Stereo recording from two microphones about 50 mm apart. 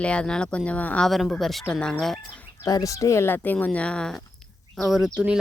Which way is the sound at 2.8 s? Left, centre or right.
Left.